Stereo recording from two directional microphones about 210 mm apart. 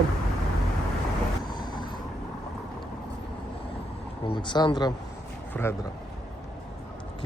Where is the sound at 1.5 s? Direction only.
20° left (ahead or behind).